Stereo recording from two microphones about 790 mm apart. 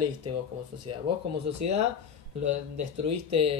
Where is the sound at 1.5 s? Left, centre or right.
Right.